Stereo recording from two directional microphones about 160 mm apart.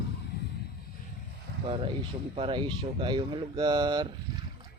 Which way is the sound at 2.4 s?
35° right (ahead or behind).